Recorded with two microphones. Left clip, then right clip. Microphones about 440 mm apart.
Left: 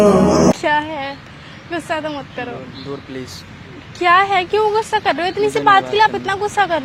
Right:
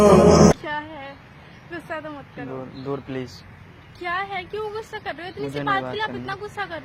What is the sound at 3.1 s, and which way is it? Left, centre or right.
Speech, right.